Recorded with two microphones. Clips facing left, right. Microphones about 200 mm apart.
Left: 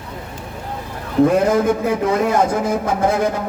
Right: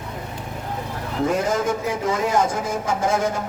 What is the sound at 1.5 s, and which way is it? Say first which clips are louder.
Speech: left 6 dB; 60° left (ahead or behind).